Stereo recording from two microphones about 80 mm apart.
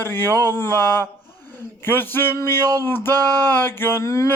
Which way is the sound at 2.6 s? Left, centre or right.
Right.